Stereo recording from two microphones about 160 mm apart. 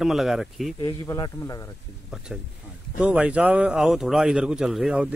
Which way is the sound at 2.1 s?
5° right (ahead or behind).